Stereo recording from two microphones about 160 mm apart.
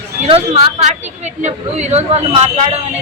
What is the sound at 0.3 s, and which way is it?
A woman's voice, 40° right (ahead or behind).